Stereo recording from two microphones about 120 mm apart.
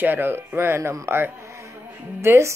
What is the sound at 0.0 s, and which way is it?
Speech, 15° right (ahead or behind).